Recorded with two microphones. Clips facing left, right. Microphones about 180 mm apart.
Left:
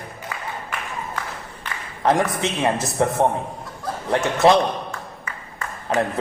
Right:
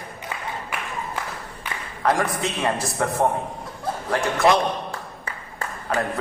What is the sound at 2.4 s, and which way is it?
Speech, 25° left (ahead or behind).